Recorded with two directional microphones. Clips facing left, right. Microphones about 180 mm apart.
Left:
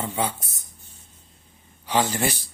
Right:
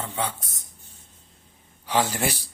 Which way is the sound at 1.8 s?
Centre (ahead or behind).